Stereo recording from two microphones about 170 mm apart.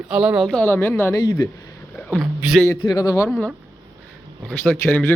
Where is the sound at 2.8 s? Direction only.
20° left (ahead or behind).